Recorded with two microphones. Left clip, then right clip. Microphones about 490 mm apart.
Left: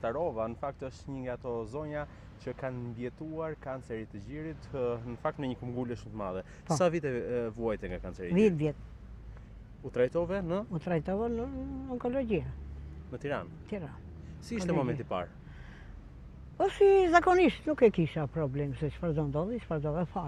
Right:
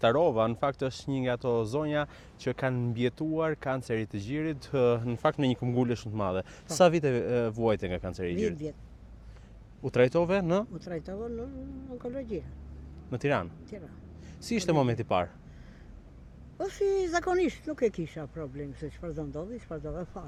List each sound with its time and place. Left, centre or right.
0.0 s speech: right
8.4 s speech: left
9.8 s speech: right
10.8 s speech: left
13.1 s speech: right
13.7 s speech: left
14.4 s speech: right
16.6 s speech: left